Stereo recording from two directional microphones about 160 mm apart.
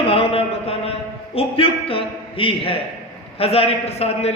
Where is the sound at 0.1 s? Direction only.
35° left (ahead or behind).